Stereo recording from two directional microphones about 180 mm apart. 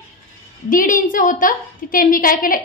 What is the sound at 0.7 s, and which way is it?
A woman's voice, 50° left (ahead or behind).